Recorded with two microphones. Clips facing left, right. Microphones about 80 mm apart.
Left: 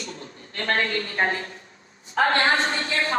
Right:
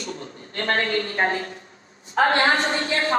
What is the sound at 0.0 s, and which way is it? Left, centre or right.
A woman's voice, right.